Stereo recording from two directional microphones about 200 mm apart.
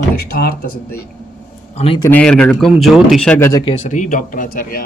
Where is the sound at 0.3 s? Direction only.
45° left (ahead or behind).